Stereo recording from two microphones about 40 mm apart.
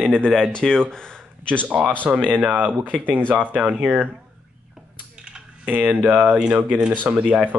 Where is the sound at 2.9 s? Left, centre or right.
Right.